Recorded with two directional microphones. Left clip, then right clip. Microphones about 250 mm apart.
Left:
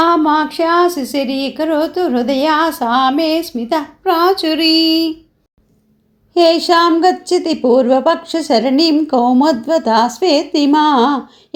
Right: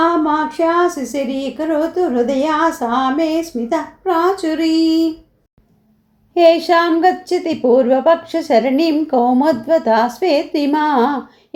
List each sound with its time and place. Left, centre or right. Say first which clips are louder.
0.0 s speech: left 3 dB; left
6.3 s a woman's voice: even; centre